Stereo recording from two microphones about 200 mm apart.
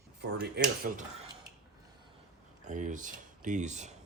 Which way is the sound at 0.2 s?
55° right (ahead or behind).